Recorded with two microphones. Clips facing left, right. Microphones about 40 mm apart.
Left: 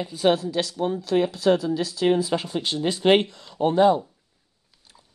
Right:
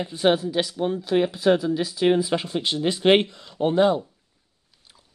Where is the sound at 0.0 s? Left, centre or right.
Right.